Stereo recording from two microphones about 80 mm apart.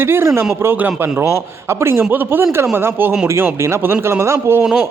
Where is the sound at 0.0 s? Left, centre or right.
Right.